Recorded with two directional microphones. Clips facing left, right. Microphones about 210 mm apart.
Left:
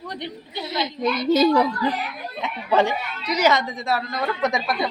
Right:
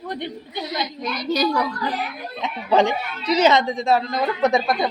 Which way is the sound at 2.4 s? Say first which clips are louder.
Right 2 dB; 20° right (ahead or behind).